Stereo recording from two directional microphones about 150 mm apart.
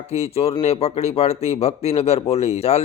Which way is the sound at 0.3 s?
40° left (ahead or behind).